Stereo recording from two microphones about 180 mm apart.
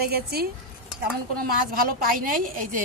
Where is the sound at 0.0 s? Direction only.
60° right (ahead or behind).